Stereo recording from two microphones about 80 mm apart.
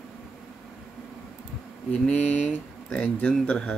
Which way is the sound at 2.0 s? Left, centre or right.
Centre.